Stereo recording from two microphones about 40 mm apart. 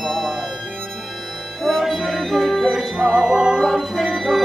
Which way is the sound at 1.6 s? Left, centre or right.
Centre.